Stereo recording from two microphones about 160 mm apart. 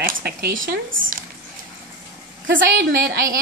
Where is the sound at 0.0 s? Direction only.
65° right (ahead or behind).